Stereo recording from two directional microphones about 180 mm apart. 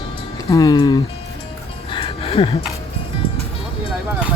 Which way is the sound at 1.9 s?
30° left (ahead or behind).